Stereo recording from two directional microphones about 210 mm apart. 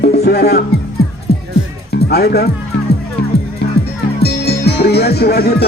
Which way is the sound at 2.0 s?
50° left (ahead or behind).